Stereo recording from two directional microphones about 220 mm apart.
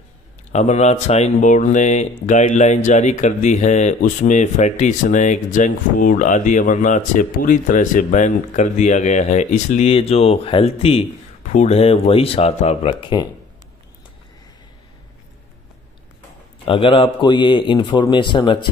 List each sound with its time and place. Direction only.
0.5 s a man's voice: 30° left (ahead or behind)
16.6 s a man's voice: 25° left (ahead or behind)